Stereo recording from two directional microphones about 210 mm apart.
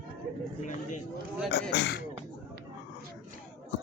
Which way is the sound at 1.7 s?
50° left (ahead or behind).